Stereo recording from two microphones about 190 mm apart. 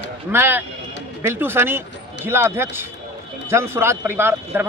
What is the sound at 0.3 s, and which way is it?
A man's voice, 10° right (ahead or behind).